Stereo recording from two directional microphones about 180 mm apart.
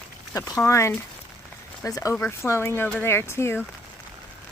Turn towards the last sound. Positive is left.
turn(degrees=15)  # may be behind; listen again after turning